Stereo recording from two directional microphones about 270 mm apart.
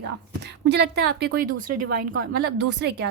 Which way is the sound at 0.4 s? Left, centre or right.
Right.